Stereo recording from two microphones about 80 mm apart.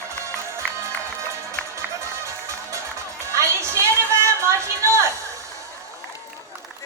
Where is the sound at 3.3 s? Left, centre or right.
Right.